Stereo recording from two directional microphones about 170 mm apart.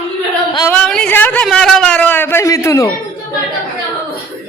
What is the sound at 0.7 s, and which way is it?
Speech, 5° left (ahead or behind).